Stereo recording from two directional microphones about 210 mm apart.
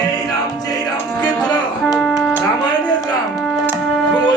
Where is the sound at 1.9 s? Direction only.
Centre (ahead or behind).